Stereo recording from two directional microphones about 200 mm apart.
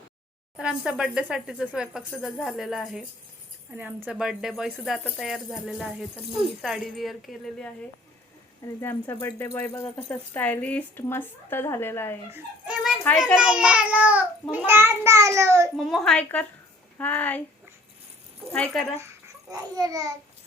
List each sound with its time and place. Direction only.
0.5 s speech: 5° right (ahead or behind)
12.3 s dog: 5° right (ahead or behind)
13.1 s speech: 10° left (ahead or behind)
13.3 s a child's voice: 5° right (ahead or behind)
15.8 s speech: centre (ahead or behind)
18.5 s speech: 5° left (ahead or behind)
19.5 s a child's voice: 15° right (ahead or behind)